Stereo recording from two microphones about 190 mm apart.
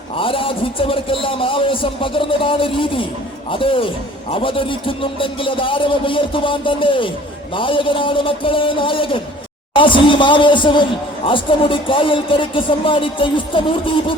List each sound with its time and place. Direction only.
0.2 s a man's voice: 25° left (ahead or behind)